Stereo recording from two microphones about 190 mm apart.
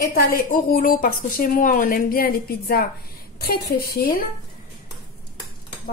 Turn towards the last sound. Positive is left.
turn(degrees=55)  # may be behind; listen again after turning